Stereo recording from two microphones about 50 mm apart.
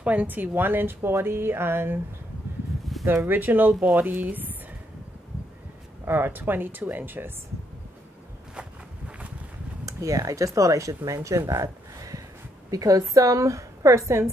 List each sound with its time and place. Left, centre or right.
0.0 s speech: right
3.1 s speech: right
6.0 s speech: right
9.8 s a woman's voice: right
11.1 s a woman's voice: right
13.1 s a woman's voice: right